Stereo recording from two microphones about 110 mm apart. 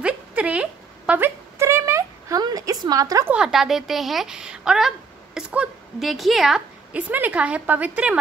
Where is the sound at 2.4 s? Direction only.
35° right (ahead or behind).